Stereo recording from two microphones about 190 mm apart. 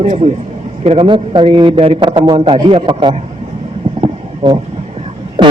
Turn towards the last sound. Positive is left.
turn(degrees=-25)  # may be behind; listen again after turning